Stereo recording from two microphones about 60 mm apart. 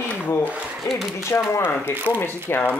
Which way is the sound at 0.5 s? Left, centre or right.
Right.